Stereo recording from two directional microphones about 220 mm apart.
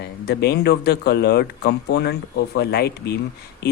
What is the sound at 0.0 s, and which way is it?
Speech, 50° left (ahead or behind).